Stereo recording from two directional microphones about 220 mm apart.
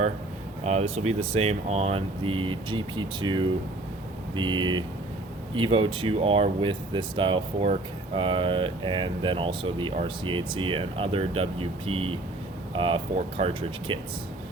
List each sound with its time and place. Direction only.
0.6 s speech: 30° right (ahead or behind)